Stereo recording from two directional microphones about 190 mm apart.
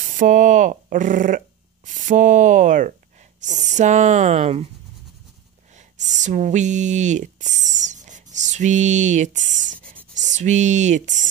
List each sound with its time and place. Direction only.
0.2 s speech: 45° right (ahead or behind)
5.9 s speech: 40° right (ahead or behind)